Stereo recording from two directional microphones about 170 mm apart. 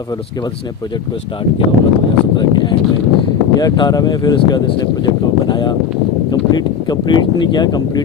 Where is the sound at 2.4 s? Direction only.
25° left (ahead or behind).